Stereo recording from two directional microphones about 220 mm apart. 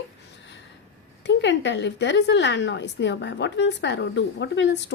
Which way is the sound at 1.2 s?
55° left (ahead or behind).